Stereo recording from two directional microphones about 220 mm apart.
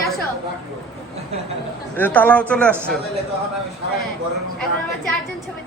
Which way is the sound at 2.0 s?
10° left (ahead or behind).